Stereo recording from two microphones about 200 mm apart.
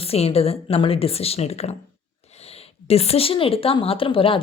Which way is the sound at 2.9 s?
30° left (ahead or behind).